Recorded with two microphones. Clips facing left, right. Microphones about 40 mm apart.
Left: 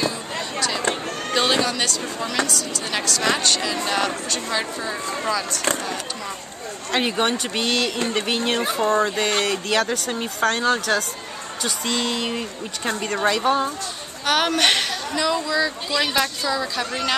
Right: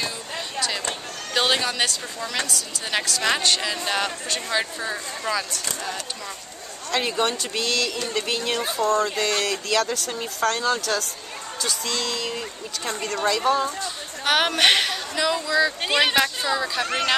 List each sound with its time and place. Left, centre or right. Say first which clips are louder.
0.6 s a sound: left 2 dB; centre
1.3 s a woman's voice: left 2 dB; centre
6.9 s speech: left 2 dB; left
14.2 s a woman's voice: even; centre
16.2 s a woman's voice: even; centre